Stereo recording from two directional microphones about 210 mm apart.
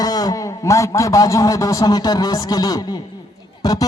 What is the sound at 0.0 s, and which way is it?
A man's voice, 20° left (ahead or behind).